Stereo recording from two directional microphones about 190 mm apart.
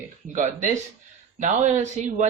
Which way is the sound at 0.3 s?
40° right (ahead or behind).